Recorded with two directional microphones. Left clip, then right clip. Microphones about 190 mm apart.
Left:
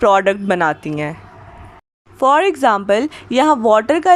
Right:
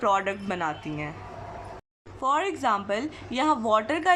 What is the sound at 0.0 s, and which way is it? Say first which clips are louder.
A woman's voice: left 12 dB; 35° left (ahead or behind).